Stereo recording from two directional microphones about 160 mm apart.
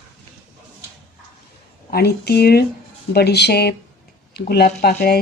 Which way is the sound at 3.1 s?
90° left.